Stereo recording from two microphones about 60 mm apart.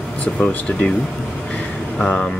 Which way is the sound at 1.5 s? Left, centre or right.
Left.